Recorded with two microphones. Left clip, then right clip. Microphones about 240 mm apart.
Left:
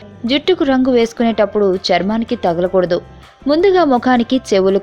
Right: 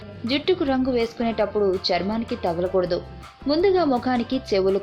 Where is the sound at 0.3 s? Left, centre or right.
Left.